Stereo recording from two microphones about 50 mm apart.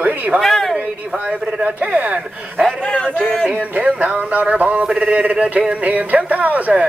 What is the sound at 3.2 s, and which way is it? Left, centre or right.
Speech, centre.